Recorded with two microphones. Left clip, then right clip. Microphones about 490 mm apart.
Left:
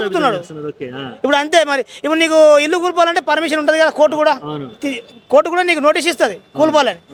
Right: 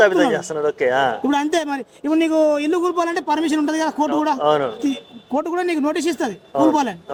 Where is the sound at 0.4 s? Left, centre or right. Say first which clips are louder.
Right 8 dB; right.